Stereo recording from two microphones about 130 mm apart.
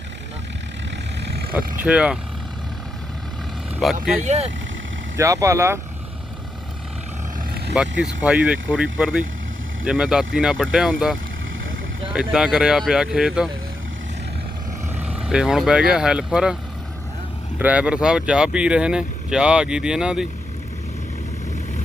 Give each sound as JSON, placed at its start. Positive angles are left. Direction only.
{"t": 1.8, "sound": "speech", "side_deg": -5}
{"t": 3.8, "sound": "speech", "side_deg": 0}
{"t": 4.2, "sound": "speech", "side_deg": -60}
{"t": 5.1, "sound": "speech", "side_deg": -25}
{"t": 7.7, "sound": "speech", "side_deg": -5}
{"t": 14.9, "sound": "speech", "side_deg": -10}
{"t": 17.6, "sound": "speech", "side_deg": -10}